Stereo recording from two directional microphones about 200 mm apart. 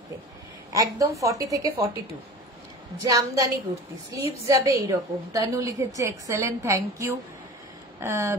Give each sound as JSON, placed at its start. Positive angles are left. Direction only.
{"t": 0.7, "sound": "a woman's voice", "side_deg": -15}
{"t": 3.0, "sound": "a woman's voice", "side_deg": -15}